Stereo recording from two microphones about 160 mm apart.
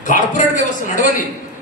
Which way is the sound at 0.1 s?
55° left (ahead or behind).